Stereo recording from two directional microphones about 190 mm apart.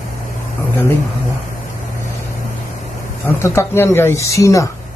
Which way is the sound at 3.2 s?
15° left (ahead or behind).